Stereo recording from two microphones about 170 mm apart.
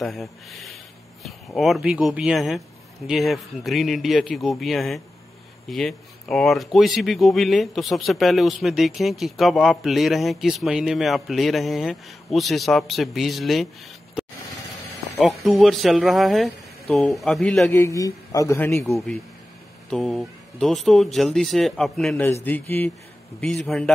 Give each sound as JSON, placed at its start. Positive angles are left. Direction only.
{"t": 0.0, "sound": "speech", "side_deg": 0}
{"t": 17.7, "sound": "speech", "side_deg": 20}
{"t": 18.9, "sound": "speech", "side_deg": 0}